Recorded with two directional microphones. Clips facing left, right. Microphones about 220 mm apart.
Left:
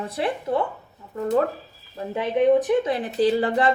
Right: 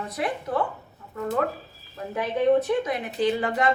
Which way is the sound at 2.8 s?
30° left (ahead or behind).